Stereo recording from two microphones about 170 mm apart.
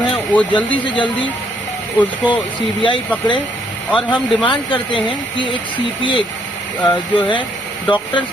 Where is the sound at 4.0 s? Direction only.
25° left (ahead or behind).